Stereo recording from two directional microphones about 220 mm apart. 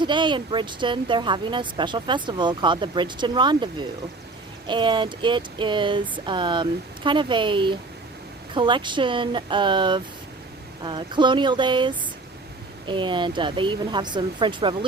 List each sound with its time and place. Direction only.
0.0 s speech: 20° right (ahead or behind)